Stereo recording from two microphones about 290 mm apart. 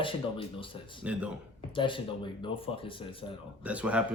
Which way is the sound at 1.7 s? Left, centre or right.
Centre.